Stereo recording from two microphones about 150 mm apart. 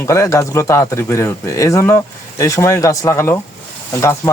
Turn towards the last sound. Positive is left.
turn(degrees=20)  # may be behind; listen again after turning